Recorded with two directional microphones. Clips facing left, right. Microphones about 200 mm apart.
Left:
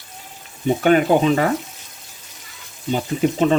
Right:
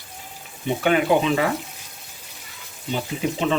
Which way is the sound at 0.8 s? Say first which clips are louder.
Left 3 dB; 45° left (ahead or behind).